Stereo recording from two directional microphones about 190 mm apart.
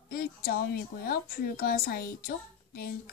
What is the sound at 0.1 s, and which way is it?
A woman's voice, 55° left (ahead or behind).